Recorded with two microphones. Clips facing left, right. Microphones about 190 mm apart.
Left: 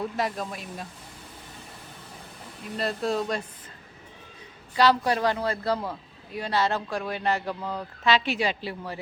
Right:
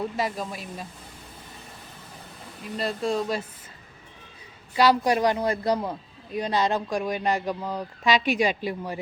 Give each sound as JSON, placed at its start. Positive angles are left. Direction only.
{"t": 0.0, "sound": "speech", "side_deg": 0}
{"t": 2.7, "sound": "speech", "side_deg": 0}
{"t": 4.8, "sound": "a man's voice", "side_deg": -15}